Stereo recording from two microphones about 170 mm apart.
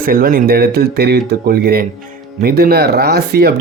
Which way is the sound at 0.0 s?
60° right (ahead or behind).